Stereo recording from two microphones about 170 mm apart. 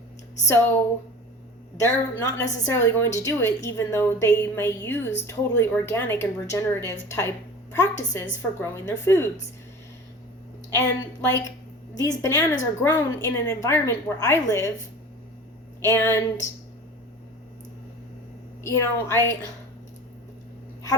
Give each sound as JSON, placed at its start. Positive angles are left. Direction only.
{"t": 0.4, "sound": "a woman's voice", "side_deg": 15}
{"t": 1.8, "sound": "a woman's voice", "side_deg": 15}
{"t": 11.9, "sound": "a woman's voice", "side_deg": 20}
{"t": 15.8, "sound": "a woman's voice", "side_deg": 15}
{"t": 18.6, "sound": "a woman's voice", "side_deg": 15}